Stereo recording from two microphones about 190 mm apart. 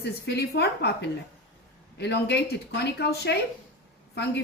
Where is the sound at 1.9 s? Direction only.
65° left (ahead or behind).